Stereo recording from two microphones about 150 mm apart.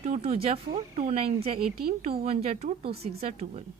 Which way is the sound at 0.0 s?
50° right (ahead or behind).